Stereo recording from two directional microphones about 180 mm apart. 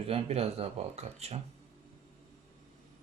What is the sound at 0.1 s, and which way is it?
Speech, 35° right (ahead or behind).